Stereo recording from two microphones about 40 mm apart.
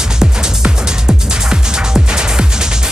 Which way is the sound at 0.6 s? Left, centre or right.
Right.